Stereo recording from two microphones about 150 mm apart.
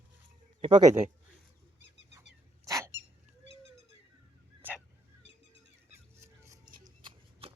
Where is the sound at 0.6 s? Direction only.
30° right (ahead or behind).